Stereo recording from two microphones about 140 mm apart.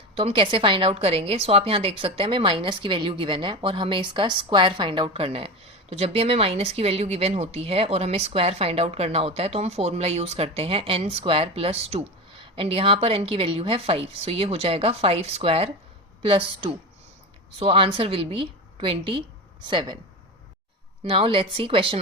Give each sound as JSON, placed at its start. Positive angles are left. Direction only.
{"t": 0.1, "sound": "a woman's voice", "side_deg": -45}
{"t": 21.0, "sound": "a woman's voice", "side_deg": -40}